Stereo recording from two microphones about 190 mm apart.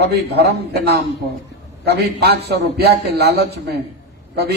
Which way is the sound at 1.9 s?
60° right (ahead or behind).